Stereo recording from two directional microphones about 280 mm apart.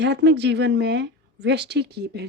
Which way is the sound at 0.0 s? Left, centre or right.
Right.